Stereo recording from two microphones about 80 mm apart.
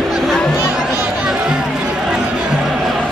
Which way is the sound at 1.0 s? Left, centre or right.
Centre.